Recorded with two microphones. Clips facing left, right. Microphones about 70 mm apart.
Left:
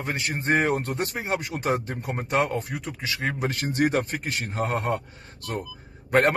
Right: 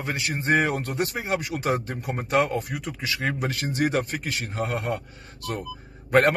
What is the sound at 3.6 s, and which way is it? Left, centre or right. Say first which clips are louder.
Speech: left 2 dB; left.